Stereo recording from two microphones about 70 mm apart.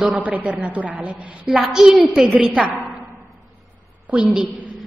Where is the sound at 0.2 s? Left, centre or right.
Right.